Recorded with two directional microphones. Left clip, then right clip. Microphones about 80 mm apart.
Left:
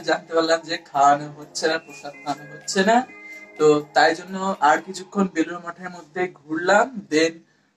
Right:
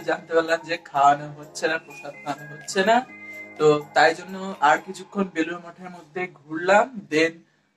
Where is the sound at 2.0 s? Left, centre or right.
Left.